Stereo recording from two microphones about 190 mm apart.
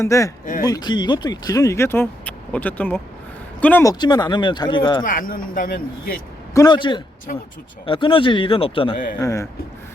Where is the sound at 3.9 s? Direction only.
20° left (ahead or behind).